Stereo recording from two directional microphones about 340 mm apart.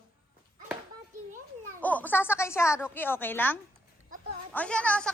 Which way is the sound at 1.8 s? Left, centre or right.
Centre.